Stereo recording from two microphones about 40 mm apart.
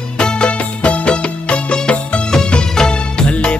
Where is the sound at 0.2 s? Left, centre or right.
Left.